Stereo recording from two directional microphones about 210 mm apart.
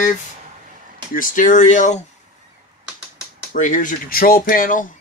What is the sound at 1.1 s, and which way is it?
Speech, 40° left (ahead or behind).